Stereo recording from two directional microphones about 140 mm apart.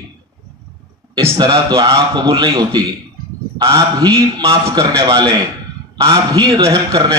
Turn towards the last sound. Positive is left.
turn(degrees=-25)  # may be behind; listen again after turning